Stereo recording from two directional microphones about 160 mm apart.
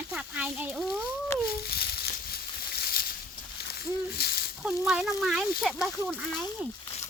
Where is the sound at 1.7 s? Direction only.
75° left (ahead or behind).